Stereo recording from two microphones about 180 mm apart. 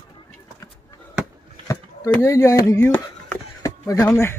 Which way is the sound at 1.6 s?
20° left (ahead or behind).